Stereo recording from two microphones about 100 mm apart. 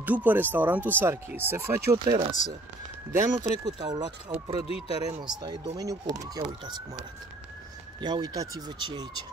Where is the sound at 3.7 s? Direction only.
45° right (ahead or behind).